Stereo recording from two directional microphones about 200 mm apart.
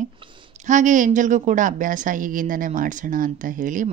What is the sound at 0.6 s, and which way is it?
Speech, 40° right (ahead or behind).